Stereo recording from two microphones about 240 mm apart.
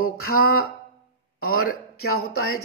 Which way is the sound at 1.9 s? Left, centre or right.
Left.